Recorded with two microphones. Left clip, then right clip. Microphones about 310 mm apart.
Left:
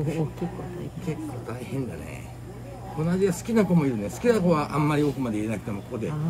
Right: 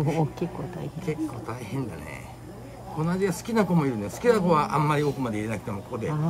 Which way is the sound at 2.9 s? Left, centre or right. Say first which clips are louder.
Left 2 dB; centre.